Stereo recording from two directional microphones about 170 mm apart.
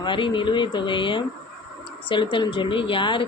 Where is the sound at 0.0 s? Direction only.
30° left (ahead or behind).